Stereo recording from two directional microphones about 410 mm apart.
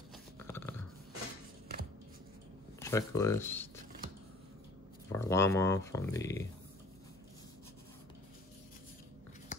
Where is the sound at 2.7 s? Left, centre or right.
Centre.